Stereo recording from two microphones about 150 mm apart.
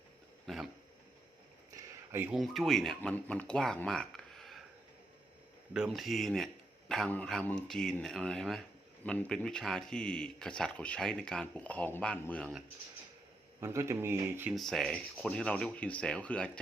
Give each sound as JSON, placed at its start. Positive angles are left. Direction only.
{"t": 0.4, "sound": "dog", "side_deg": 0}
{"t": 1.7, "sound": "a sound", "side_deg": -15}
{"t": 2.3, "sound": "speech", "side_deg": 0}
{"t": 5.7, "sound": "speech", "side_deg": -5}
{"t": 13.6, "sound": "speech", "side_deg": -20}
{"t": 14.5, "sound": "speech", "side_deg": 0}